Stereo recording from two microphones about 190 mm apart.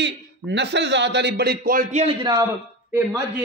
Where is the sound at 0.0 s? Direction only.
65° right (ahead or behind); by 2.1 s 35° right (ahead or behind).